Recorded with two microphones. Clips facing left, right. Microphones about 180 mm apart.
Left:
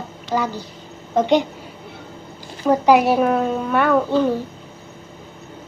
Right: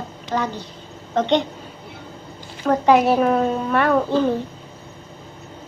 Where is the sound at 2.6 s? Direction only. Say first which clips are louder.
Left 1 dB; 5° left (ahead or behind).